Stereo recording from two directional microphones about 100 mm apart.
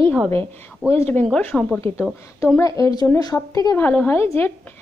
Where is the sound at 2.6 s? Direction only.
35° left (ahead or behind).